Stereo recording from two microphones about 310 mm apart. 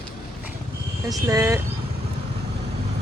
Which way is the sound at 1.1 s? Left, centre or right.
Centre.